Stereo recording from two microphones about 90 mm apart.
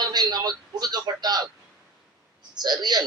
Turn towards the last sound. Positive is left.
turn(degrees=-50)  # may be behind; listen again after turning